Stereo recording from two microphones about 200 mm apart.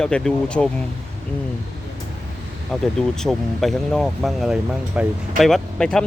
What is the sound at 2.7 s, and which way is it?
Speech, centre (ahead or behind).